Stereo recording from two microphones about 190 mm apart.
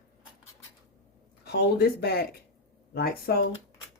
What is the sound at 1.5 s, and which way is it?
A woman's voice, 55° left (ahead or behind).